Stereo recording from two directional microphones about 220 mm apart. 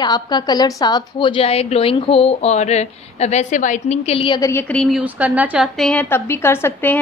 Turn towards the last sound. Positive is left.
turn(degrees=10)  # may be behind; listen again after turning